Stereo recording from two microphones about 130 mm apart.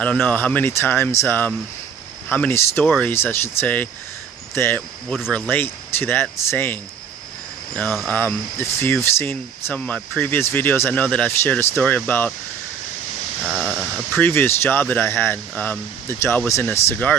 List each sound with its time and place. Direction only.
0.0 s speech: 10° left (ahead or behind)
7.8 s speech: 5° left (ahead or behind)
8.1 s speech: 15° left (ahead or behind)
13.4 s speech: 5° right (ahead or behind)
14.2 s speech: 15° left (ahead or behind)